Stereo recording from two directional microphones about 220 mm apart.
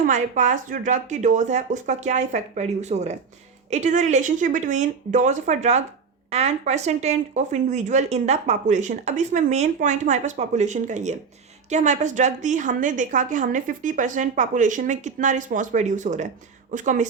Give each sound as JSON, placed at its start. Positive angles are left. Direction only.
{"t": 0.0, "sound": "speech", "side_deg": -35}